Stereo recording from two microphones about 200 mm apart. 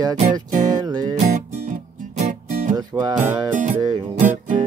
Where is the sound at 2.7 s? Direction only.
20° right (ahead or behind).